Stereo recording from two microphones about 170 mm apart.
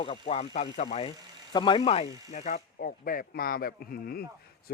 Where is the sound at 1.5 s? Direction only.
30° left (ahead or behind).